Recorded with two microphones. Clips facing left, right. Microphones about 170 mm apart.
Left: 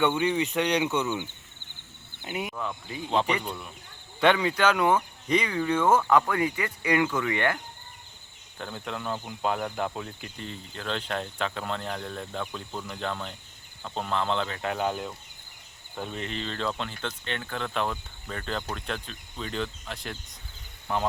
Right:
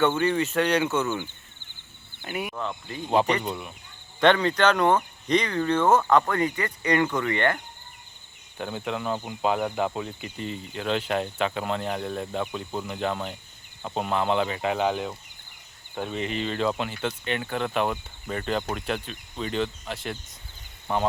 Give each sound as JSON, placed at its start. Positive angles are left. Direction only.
{"t": 0.0, "sound": "speech", "side_deg": 15}
{"t": 2.5, "sound": "speech", "side_deg": -20}
{"t": 3.4, "sound": "speech", "side_deg": -10}
{"t": 4.2, "sound": "speech", "side_deg": 10}
{"t": 8.5, "sound": "speech", "side_deg": -5}